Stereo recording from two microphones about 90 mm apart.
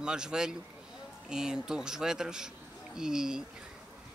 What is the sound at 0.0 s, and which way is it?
Speech, 10° right (ahead or behind).